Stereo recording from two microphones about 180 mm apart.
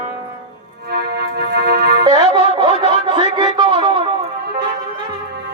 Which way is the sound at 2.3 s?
25° right (ahead or behind).